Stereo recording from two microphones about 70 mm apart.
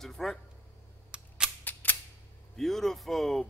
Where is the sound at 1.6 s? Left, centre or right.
Left.